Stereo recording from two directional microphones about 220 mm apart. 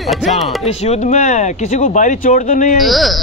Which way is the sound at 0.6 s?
30° left (ahead or behind).